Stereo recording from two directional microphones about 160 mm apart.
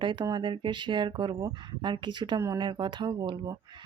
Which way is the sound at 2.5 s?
30° right (ahead or behind).